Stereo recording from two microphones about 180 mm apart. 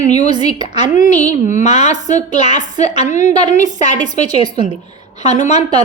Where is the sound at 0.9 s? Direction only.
40° left (ahead or behind).